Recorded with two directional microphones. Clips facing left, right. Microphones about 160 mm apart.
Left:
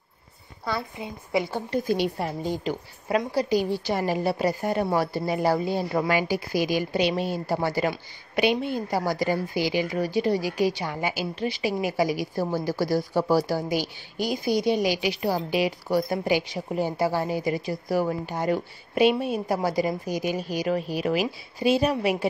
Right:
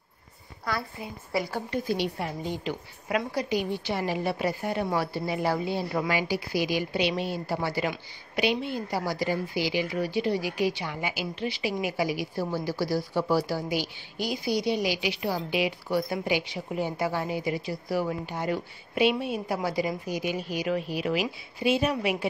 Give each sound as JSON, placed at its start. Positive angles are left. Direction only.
{"t": 0.7, "sound": "a woman's voice", "side_deg": 25}
{"t": 1.7, "sound": "a woman's voice", "side_deg": 40}